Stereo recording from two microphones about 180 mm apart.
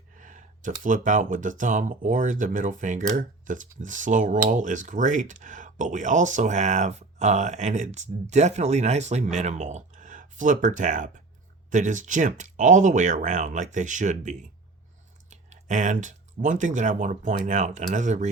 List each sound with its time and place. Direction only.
0.2 s speech: 45° right (ahead or behind)